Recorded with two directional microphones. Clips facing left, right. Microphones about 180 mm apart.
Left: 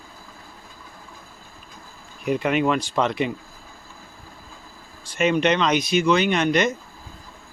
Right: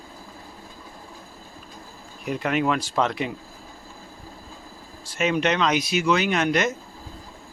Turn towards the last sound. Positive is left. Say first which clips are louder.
# left 2 dB
turn(degrees=-5)  # may be behind; listen again after turning